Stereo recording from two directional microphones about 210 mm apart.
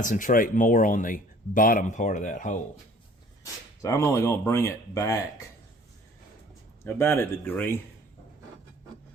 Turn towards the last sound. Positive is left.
turn(degrees=10)  # may be behind; listen again after turning